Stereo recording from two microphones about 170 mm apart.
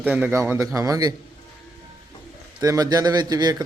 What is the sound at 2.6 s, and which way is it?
Speech, 20° right (ahead or behind).